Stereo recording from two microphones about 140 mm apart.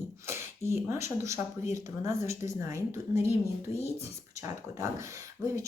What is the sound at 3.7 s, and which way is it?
Speech, 45° left (ahead or behind).